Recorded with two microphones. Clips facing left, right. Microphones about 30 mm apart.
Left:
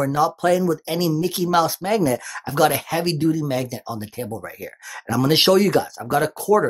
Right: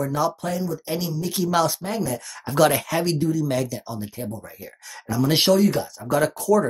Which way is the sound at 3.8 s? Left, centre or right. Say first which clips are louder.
Left 2 dB; left.